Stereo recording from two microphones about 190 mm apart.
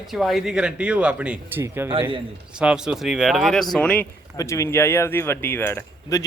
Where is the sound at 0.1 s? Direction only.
Centre (ahead or behind).